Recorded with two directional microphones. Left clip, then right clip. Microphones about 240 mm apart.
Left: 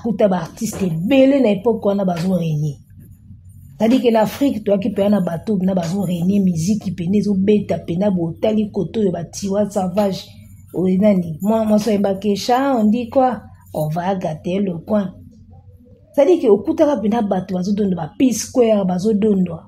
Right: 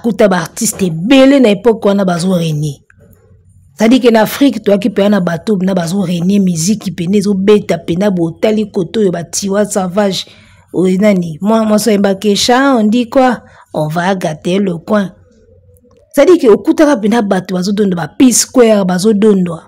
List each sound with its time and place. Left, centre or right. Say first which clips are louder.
0.0 s speech: right 7 dB; right
3.7 s speech: right 7 dB; right
16.2 s speech: right 6 dB; right